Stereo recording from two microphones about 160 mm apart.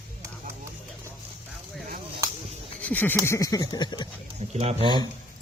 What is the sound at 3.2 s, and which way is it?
Speech, 20° left (ahead or behind).